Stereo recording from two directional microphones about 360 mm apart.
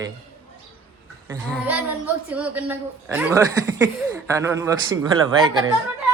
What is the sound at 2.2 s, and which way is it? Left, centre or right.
A woman's voice, centre.